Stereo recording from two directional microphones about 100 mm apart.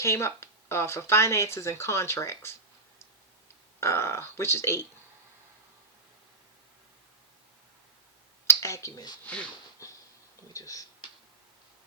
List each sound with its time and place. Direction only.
0.0 s speech: 25° left (ahead or behind)
3.8 s speech: 25° left (ahead or behind)
8.4 s speech: 30° left (ahead or behind)
9.2 s speech: 15° left (ahead or behind)
9.8 s a sound: 35° left (ahead or behind)
10.5 s speech: 35° left (ahead or behind)